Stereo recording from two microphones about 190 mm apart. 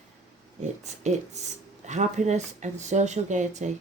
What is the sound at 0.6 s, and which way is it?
Speech, 40° right (ahead or behind).